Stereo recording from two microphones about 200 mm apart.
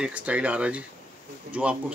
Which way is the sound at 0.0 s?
5° right (ahead or behind).